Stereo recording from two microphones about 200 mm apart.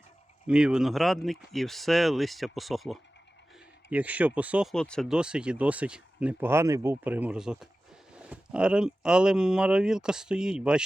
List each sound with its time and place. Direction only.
0.4 s speech: 5° right (ahead or behind)